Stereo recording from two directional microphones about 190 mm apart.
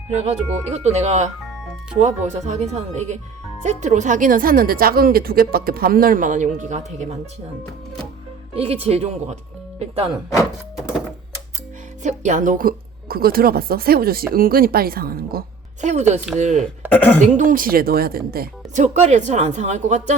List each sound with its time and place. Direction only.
0.1 s speech: 35° right (ahead or behind)
8.5 s speech: 30° right (ahead or behind)
12.0 s a woman's voice: 40° right (ahead or behind)
15.9 s speech: 35° right (ahead or behind)
16.9 s speech: 5° left (ahead or behind)
17.2 s speech: 40° right (ahead or behind)